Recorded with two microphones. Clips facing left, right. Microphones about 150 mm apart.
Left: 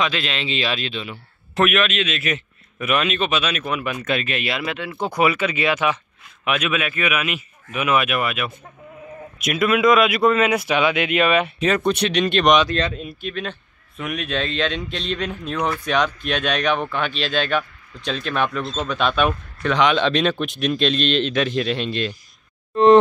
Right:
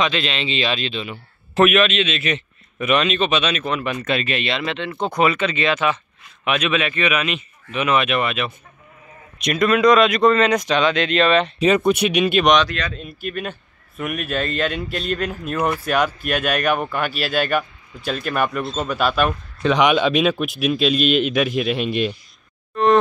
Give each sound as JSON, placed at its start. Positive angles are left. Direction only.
{"t": 0.0, "sound": "a man's voice", "side_deg": 5}
{"t": 11.6, "sound": "speech", "side_deg": -5}
{"t": 12.6, "sound": "speech", "side_deg": 25}
{"t": 13.2, "sound": "a man's voice", "side_deg": -10}
{"t": 19.6, "sound": "speech", "side_deg": -15}